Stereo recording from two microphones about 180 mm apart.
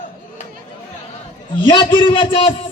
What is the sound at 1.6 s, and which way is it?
A man's voice, 25° left (ahead or behind).